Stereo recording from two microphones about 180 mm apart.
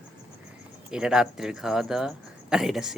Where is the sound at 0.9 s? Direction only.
5° right (ahead or behind).